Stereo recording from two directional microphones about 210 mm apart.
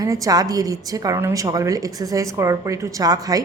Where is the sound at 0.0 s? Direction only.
15° right (ahead or behind).